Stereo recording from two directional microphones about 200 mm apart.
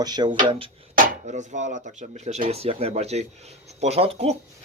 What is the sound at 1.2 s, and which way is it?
Speech, 35° right (ahead or behind).